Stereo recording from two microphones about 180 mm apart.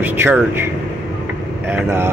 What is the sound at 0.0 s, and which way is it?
Speech, 10° right (ahead or behind).